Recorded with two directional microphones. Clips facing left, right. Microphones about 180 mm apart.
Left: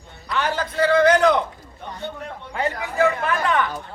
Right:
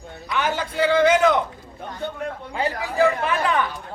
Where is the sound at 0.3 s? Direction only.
5° right (ahead or behind).